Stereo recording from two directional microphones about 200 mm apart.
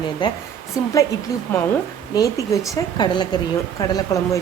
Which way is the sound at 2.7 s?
20° left (ahead or behind).